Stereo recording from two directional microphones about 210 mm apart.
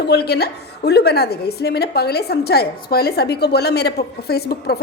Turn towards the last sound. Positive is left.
turn(degrees=50)  # may be behind; listen again after turning